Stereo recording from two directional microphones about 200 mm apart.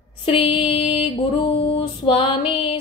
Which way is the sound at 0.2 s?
25° left (ahead or behind).